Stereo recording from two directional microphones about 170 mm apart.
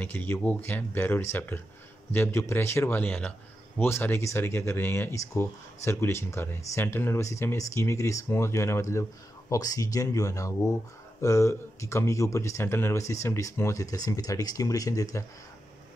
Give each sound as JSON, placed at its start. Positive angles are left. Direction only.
{"t": 0.0, "sound": "a man's voice", "side_deg": 10}